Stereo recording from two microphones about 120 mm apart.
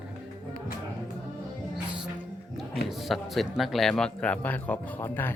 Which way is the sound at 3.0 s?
Centre (ahead or behind).